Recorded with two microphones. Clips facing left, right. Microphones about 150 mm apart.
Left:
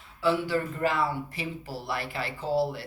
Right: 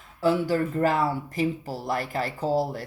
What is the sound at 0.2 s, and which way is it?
Speech, 40° right (ahead or behind).